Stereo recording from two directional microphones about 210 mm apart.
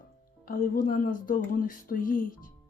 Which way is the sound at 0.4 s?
40° left (ahead or behind).